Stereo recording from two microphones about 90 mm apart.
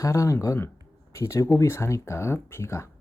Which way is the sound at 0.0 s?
35° left (ahead or behind).